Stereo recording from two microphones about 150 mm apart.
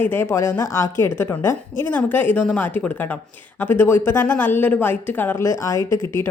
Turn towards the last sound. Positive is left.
turn(degrees=20)  # may be behind; listen again after turning